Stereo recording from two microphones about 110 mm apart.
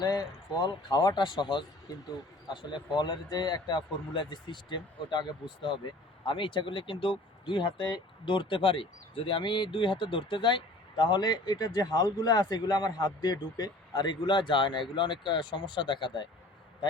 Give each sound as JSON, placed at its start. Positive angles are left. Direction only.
{"t": 0.0, "sound": "speech", "side_deg": 35}